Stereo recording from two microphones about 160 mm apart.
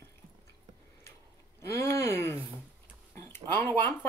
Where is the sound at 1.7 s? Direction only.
15° left (ahead or behind).